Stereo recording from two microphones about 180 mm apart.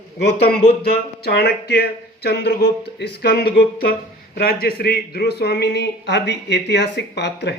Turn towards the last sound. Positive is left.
turn(degrees=70)  # may be behind; listen again after turning